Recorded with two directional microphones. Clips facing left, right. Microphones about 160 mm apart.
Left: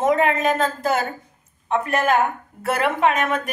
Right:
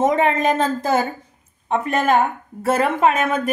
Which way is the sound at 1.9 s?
30° right (ahead or behind).